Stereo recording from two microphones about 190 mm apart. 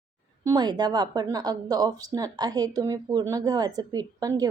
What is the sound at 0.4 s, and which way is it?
A woman's voice, 20° right (ahead or behind).